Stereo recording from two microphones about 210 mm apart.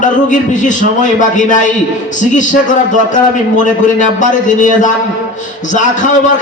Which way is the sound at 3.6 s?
35° left (ahead or behind).